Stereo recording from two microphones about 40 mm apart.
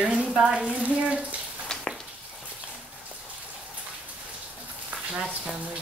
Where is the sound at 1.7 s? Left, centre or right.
Centre.